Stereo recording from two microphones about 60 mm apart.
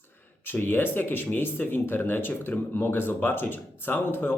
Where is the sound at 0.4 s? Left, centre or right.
Left.